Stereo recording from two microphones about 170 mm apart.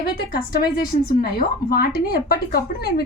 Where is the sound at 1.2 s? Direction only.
60° left (ahead or behind).